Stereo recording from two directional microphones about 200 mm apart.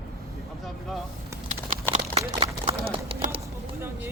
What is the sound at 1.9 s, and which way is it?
Run, 30° right (ahead or behind).